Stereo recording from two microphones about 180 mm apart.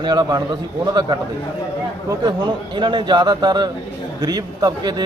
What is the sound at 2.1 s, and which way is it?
Speech, 20° right (ahead or behind).